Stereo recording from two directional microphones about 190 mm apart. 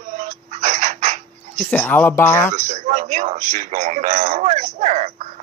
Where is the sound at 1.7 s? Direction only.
10° left (ahead or behind).